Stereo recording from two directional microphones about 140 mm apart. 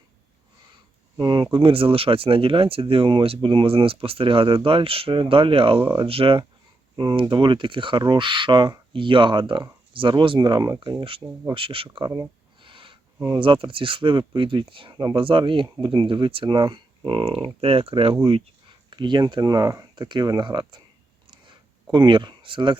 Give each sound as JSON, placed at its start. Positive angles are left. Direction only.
{"t": 1.1, "sound": "speech", "side_deg": -30}
{"t": 11.5, "sound": "speech", "side_deg": -40}
{"t": 12.6, "sound": "a sound", "side_deg": -40}
{"t": 13.1, "sound": "speech", "side_deg": -25}
{"t": 13.4, "sound": "speech", "side_deg": -40}
{"t": 21.2, "sound": "a sound", "side_deg": -35}
{"t": 21.9, "sound": "speech", "side_deg": -35}